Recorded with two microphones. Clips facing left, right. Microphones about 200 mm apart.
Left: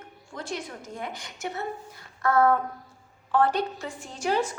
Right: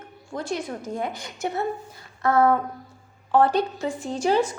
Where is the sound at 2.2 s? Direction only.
15° right (ahead or behind).